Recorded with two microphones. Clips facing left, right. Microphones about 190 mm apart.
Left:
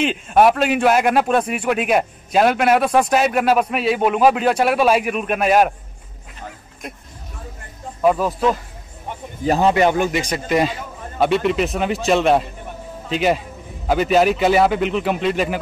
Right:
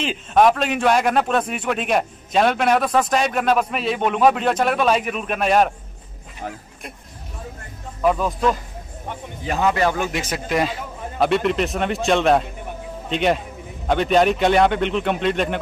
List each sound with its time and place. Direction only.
0.3 s a man's voice: 10° left (ahead or behind)
8.0 s a man's voice: 5° left (ahead or behind)
9.4 s speech: 35° left (ahead or behind)
9.8 s speech: 20° left (ahead or behind)
10.1 s a man's voice: centre (ahead or behind)